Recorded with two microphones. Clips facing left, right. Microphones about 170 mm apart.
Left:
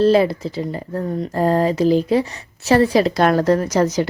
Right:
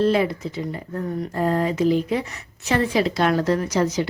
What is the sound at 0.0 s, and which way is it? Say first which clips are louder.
A woman's voice: left 5 dB; 35° left (ahead or behind).